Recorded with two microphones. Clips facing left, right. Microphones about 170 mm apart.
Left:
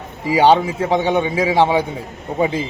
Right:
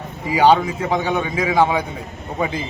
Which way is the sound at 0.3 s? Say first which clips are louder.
Left 1 dB; 30° left (ahead or behind).